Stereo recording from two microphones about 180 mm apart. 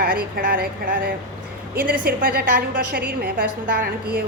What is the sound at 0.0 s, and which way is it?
A woman's voice, 55° right (ahead or behind).